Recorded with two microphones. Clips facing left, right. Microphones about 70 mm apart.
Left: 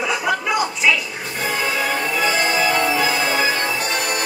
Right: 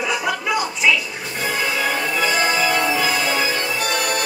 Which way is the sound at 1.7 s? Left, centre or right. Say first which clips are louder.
Even; centre.